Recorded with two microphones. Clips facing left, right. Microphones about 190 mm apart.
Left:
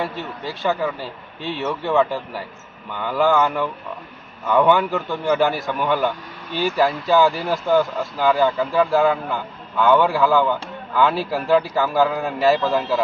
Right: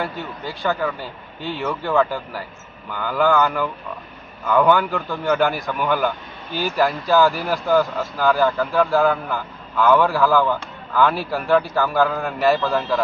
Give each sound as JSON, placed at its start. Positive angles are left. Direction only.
{"t": 0.0, "sound": "speech", "side_deg": 0}
{"t": 7.3, "sound": "speech", "side_deg": 25}
{"t": 7.5, "sound": "speech", "side_deg": 0}